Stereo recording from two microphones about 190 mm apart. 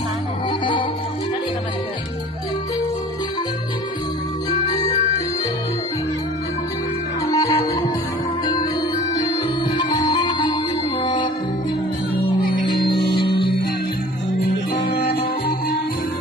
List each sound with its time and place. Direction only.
0.6 s music: 25° left (ahead or behind)
4.6 s music: 20° left (ahead or behind)
7.3 s music: 20° left (ahead or behind)
9.1 s music: 20° left (ahead or behind)
12.6 s music: 25° left (ahead or behind)
14.7 s music: 55° left (ahead or behind)